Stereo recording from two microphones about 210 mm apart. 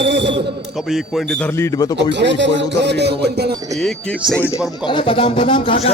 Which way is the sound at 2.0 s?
55° right (ahead or behind).